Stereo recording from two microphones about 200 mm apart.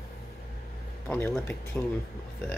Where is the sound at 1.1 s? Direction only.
10° left (ahead or behind).